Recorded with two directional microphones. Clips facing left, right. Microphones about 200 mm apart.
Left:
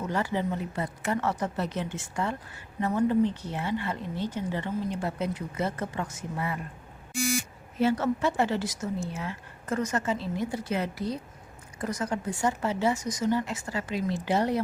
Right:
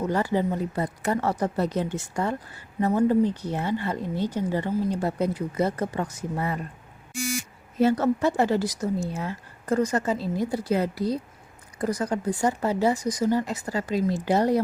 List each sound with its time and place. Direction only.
0.0 s a woman's voice: 40° right (ahead or behind)
7.8 s a woman's voice: 40° right (ahead or behind)